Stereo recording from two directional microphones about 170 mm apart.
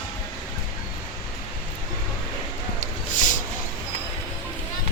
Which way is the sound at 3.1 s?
50° left (ahead or behind).